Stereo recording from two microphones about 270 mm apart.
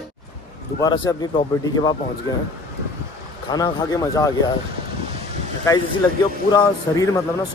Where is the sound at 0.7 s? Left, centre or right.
Centre.